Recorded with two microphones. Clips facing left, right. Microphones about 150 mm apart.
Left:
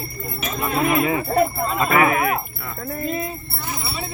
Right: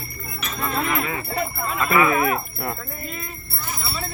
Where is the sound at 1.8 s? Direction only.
35° left (ahead or behind).